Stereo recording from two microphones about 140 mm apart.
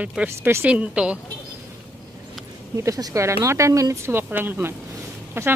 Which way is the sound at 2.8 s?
25° right (ahead or behind).